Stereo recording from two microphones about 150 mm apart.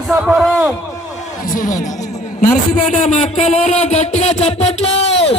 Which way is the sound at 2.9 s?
55° left (ahead or behind).